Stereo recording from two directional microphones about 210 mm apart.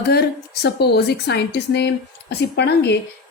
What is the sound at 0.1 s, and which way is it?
A woman's voice, 50° left (ahead or behind).